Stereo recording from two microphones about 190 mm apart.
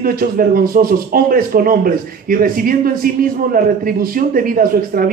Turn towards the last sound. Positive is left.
turn(degrees=-50)  # may be behind; listen again after turning